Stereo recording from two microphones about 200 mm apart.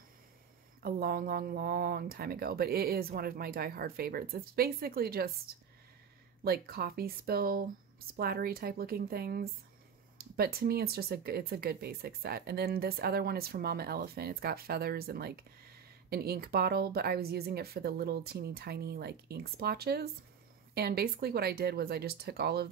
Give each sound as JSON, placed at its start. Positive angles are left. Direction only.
{"t": 0.8, "sound": "speech", "side_deg": -45}
{"t": 6.4, "sound": "speech", "side_deg": -50}